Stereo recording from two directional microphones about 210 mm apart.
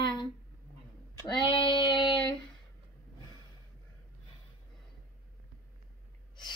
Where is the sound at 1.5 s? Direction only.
25° left (ahead or behind).